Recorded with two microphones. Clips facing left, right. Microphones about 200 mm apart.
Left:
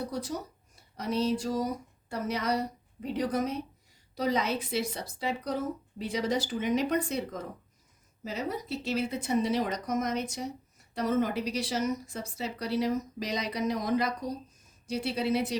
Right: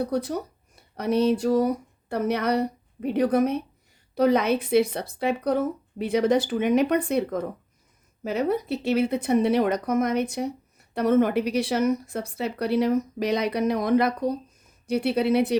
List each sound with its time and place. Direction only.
0.0 s a woman's voice: 60° right (ahead or behind)